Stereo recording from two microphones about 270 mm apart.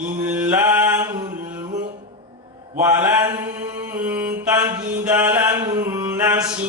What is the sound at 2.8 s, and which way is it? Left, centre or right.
Mantra, centre.